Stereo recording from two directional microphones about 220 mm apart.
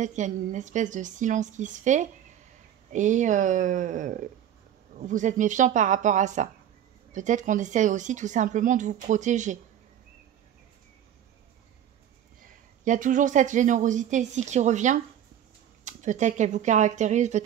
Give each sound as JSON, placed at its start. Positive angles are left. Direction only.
{"t": 0.0, "sound": "a woman's voice", "side_deg": -35}
{"t": 12.8, "sound": "a woman's voice", "side_deg": -35}